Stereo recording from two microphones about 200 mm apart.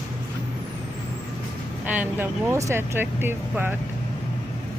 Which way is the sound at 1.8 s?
10° right (ahead or behind).